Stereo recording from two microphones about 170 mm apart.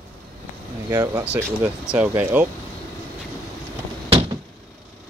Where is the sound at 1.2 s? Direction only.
10° right (ahead or behind).